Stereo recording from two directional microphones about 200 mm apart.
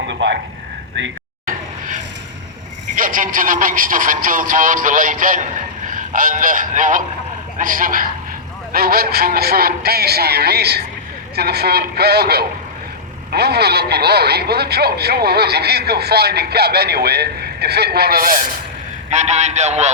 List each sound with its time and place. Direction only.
0.1 s a sound: 65° right (ahead or behind)
0.9 s speech: 65° right (ahead or behind)
2.9 s a man's voice: 45° right (ahead or behind)
19.1 s a man's voice: 35° right (ahead or behind)